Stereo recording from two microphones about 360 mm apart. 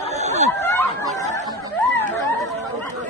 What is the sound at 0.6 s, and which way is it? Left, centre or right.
Chatter, centre.